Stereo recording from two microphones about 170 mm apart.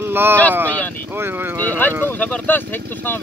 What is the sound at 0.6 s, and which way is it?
Speech, 10° left (ahead or behind).